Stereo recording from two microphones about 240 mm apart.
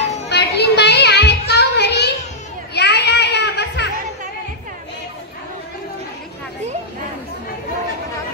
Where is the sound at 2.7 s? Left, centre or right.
Left.